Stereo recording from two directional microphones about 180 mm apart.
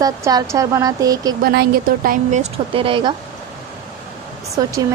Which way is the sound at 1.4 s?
60° right (ahead or behind).